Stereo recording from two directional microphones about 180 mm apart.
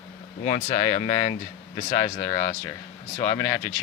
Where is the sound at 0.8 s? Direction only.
30° left (ahead or behind).